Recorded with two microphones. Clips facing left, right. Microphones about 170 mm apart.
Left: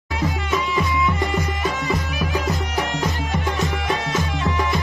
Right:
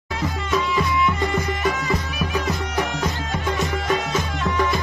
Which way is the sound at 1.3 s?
20° left (ahead or behind).